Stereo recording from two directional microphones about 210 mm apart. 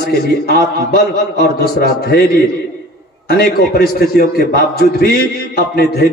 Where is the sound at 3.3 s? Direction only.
45° left (ahead or behind).